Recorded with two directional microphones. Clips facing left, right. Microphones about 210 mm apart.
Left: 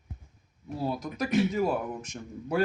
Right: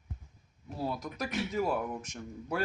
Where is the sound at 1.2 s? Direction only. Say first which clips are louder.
Left 11 dB; 20° left (ahead or behind).